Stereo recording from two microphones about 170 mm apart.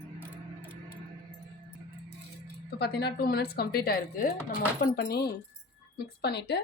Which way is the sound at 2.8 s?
70° left (ahead or behind).